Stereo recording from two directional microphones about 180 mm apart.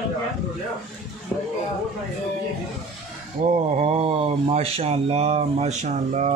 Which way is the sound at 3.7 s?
35° right (ahead or behind).